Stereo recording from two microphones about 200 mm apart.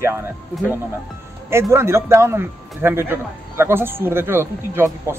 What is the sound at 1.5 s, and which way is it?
A man's voice, 15° right (ahead or behind).